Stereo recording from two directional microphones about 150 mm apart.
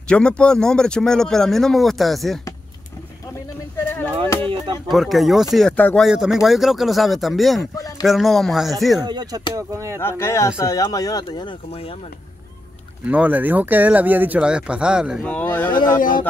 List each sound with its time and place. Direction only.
0.1 s speech: 5° left (ahead or behind)
4.8 s speech: centre (ahead or behind)
6.0 s speech: 5° right (ahead or behind)
9.0 s speech: 30° right (ahead or behind)
9.9 s speech: 15° left (ahead or behind); by 11.9 s 35° left (ahead or behind)
13.0 s speech: 10° right (ahead or behind)
15.2 s speech: 10° left (ahead or behind)
16.0 s speech: 65° left (ahead or behind)